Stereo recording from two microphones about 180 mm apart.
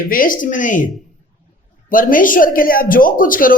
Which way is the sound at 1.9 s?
50° left (ahead or behind).